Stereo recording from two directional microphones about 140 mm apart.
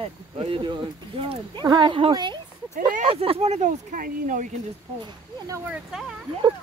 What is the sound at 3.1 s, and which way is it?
Speech, 45° right (ahead or behind).